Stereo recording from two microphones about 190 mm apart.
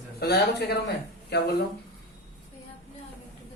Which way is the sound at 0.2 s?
55° left (ahead or behind).